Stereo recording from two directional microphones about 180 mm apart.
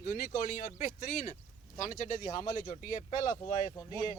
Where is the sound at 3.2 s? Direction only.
40° left (ahead or behind).